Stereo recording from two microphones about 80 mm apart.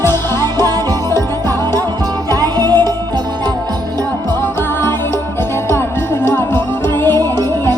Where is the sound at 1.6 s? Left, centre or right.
Right.